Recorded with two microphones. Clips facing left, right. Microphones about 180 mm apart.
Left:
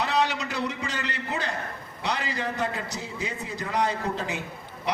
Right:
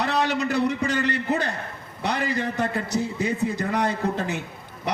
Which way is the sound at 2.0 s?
55° right (ahead or behind).